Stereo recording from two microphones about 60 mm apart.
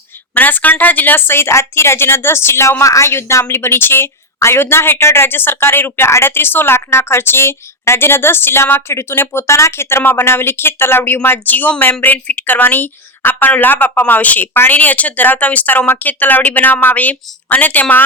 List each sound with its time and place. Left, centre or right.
0.3 s a woman's voice: left